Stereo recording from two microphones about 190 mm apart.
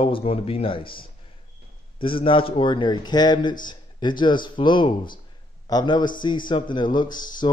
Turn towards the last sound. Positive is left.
turn(degrees=25)  # may be behind; listen again after turning